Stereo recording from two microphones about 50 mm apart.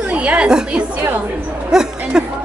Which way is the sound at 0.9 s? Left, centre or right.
Right.